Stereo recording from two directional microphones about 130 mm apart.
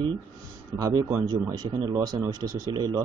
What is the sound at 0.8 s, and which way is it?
Speech, 25° right (ahead or behind).